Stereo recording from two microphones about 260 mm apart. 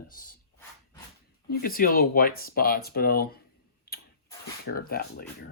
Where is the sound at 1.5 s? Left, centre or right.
Left.